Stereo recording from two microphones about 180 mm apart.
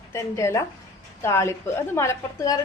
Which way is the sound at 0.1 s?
15° left (ahead or behind).